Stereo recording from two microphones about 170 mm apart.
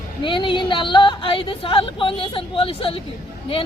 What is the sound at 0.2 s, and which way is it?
Speech, 30° left (ahead or behind).